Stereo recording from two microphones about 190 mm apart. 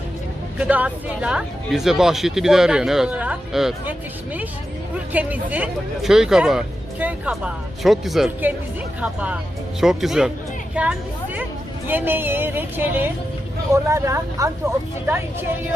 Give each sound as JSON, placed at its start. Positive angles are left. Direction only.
{"t": 0.6, "sound": "speech", "side_deg": -5}
{"t": 5.1, "sound": "speech", "side_deg": -10}